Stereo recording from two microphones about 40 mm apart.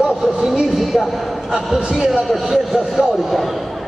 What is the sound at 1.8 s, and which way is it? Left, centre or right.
A man's voice, centre.